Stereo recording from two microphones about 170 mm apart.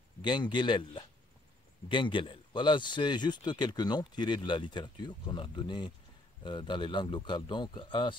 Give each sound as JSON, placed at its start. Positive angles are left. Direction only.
{"t": 0.2, "sound": "speech", "side_deg": 25}